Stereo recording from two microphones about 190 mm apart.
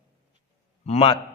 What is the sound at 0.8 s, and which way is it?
Speech, 30° left (ahead or behind).